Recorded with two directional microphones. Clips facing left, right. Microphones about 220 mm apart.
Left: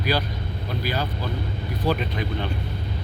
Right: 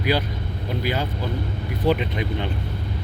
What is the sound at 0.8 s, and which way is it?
Speech, 20° right (ahead or behind).